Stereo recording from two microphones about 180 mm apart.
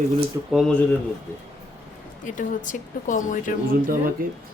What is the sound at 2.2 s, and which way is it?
Speech, 45° left (ahead or behind).